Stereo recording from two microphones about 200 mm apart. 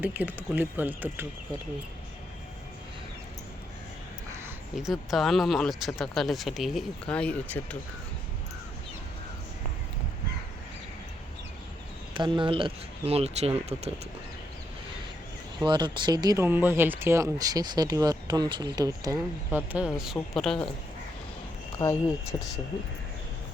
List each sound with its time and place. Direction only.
0.0 s speech: 10° right (ahead or behind)
4.8 s speech: centre (ahead or behind)
12.1 s speech: 25° right (ahead or behind)
15.6 s speech: 20° right (ahead or behind)
19.5 s speech: 5° right (ahead or behind)
21.8 s speech: 15° left (ahead or behind)